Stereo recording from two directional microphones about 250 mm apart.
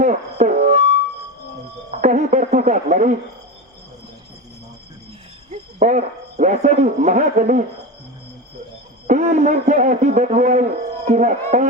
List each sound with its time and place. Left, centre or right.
0.0 s music: right
2.0 s a sound: right
5.5 s speech: right
9.0 s a man's voice: right